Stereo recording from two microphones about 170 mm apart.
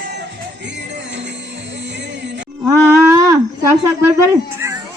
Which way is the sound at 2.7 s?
15° right (ahead or behind).